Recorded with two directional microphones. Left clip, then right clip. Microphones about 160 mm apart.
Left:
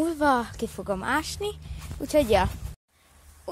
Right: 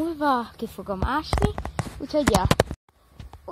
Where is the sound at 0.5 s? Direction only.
45° left (ahead or behind).